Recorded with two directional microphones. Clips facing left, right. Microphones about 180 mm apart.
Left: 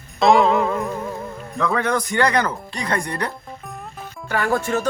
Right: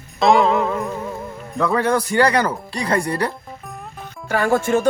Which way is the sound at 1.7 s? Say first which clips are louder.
Right 4 dB; 35° right (ahead or behind).